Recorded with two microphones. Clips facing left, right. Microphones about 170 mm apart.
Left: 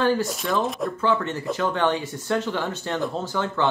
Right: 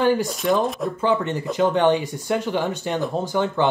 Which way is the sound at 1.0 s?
15° right (ahead or behind).